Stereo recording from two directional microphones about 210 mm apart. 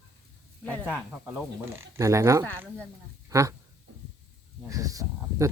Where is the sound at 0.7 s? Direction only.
10° right (ahead or behind).